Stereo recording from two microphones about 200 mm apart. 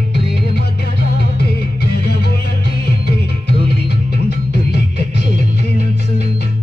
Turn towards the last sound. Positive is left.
turn(degrees=55)  # may be behind; listen again after turning